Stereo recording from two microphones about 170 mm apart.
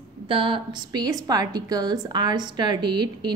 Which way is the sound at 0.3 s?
30° right (ahead or behind).